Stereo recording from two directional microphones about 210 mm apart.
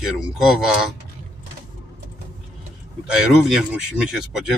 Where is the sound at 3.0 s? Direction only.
5° right (ahead or behind).